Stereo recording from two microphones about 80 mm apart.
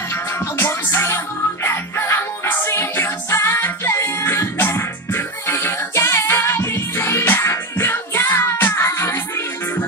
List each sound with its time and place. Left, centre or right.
0.1 s music: left